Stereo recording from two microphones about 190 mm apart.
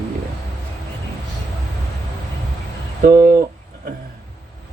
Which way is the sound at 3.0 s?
50° right (ahead or behind).